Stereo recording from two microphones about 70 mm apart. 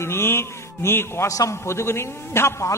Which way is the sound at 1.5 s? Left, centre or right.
Left.